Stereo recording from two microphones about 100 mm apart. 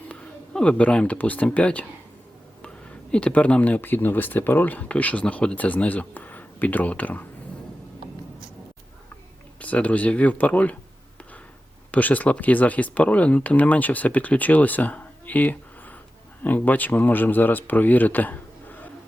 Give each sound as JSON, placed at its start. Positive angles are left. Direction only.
{"t": 0.1, "sound": "speech", "side_deg": 10}
{"t": 3.1, "sound": "speech", "side_deg": 10}
{"t": 9.6, "sound": "speech", "side_deg": 15}
{"t": 11.9, "sound": "speech", "side_deg": 15}